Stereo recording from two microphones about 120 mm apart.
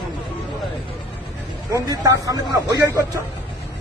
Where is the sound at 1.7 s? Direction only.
30° right (ahead or behind).